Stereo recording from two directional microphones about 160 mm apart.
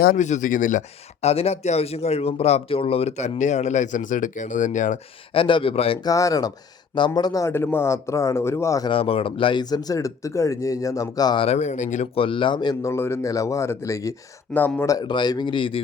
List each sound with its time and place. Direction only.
0.2 s speech: 50° left (ahead or behind)
5.3 s speech: 35° left (ahead or behind)
6.0 s speech: 20° left (ahead or behind)
8.9 s speech: 35° left (ahead or behind)
11.4 s speech: 45° left (ahead or behind)
12.1 s speech: 35° left (ahead or behind)
12.9 s speech: 15° left (ahead or behind); by 15.8 s 30° left (ahead or behind)